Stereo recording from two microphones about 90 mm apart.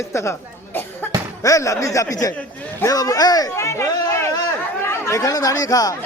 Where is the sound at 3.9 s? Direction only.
45° left (ahead or behind).